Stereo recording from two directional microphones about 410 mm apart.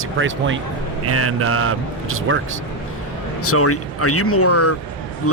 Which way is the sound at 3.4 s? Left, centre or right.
Left.